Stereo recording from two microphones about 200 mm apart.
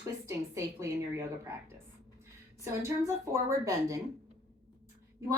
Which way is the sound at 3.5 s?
15° right (ahead or behind).